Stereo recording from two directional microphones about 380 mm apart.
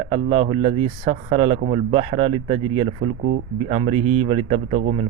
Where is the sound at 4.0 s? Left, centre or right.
Right.